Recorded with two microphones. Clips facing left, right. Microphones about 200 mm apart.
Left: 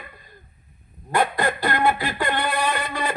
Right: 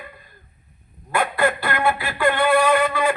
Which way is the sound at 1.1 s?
35° left (ahead or behind).